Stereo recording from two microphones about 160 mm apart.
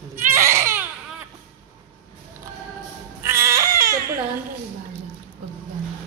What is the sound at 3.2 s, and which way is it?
Music, 15° right (ahead or behind).